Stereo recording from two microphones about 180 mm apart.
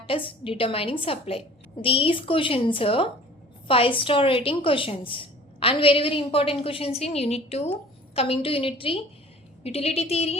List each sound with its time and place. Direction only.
0.0 s a woman's voice: 30° left (ahead or behind)